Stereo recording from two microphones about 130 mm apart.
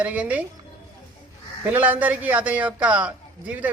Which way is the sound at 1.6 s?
10° right (ahead or behind).